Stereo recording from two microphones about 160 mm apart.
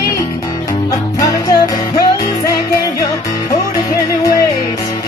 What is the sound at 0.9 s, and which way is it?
Music, 20° left (ahead or behind).